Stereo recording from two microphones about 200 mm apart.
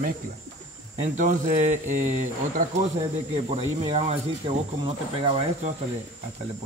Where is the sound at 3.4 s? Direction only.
30° right (ahead or behind).